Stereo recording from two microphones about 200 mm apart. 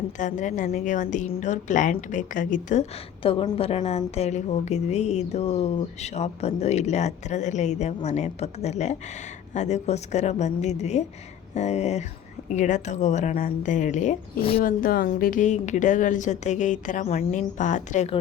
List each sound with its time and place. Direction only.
0.2 s a woman's voice: 40° left (ahead or behind)
3.2 s a woman's voice: 25° left (ahead or behind)
14.6 s a woman's voice: 45° left (ahead or behind)